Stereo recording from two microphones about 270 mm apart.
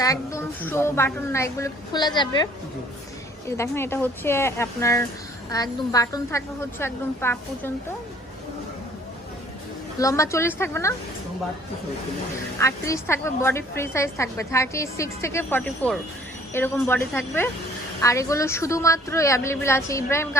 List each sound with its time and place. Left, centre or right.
0.0 s a woman's voice: centre
10.0 s a woman's voice: centre
12.5 s a woman's voice: centre